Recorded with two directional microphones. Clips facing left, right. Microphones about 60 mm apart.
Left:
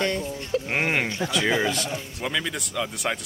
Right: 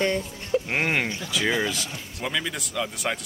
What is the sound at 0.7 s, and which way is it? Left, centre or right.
Speech, centre.